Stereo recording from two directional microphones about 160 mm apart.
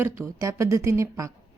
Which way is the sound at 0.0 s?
20° right (ahead or behind).